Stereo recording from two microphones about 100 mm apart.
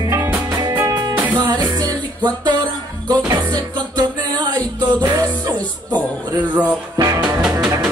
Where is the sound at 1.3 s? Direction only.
45° right (ahead or behind).